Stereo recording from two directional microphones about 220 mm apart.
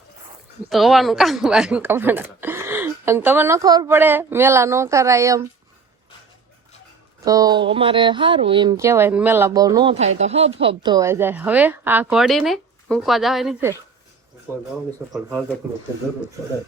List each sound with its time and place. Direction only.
0.7 s a woman's voice: centre (ahead or behind)
7.3 s a woman's voice: 15° right (ahead or behind)
10.2 s a woman's voice: 30° right (ahead or behind); by 13.7 s centre (ahead or behind)
15.1 s a woman's voice: 5° right (ahead or behind)